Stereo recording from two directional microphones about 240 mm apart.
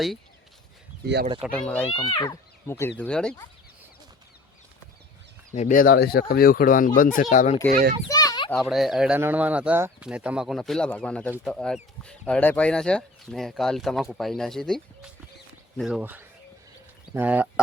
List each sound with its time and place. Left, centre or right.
1.0 s speech: right
1.4 s speech: centre
1.9 s speech: left; by 3.3 s centre
5.5 s speech: left
7.7 s a child's voice: right
8.1 s a sound: centre
8.5 s speech: centre